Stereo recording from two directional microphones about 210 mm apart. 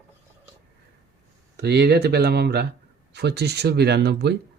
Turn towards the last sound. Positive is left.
turn(degrees=-50)  # may be behind; listen again after turning